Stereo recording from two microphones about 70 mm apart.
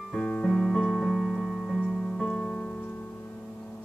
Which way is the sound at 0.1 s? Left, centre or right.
Centre.